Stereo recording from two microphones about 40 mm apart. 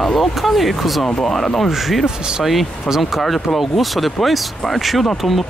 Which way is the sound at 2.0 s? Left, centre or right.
Centre.